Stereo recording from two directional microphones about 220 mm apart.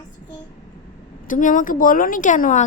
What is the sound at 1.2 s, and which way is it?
Speech, 35° left (ahead or behind).